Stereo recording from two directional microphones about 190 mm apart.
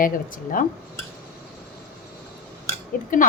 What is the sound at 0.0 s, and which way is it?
Speech, 45° left (ahead or behind).